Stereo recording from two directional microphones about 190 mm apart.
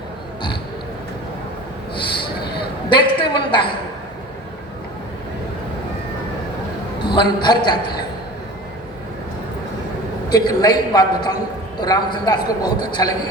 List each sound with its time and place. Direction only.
2.9 s a sound: 25° left (ahead or behind)
7.0 s a man's voice: 25° left (ahead or behind)
10.2 s a man's voice: 20° left (ahead or behind)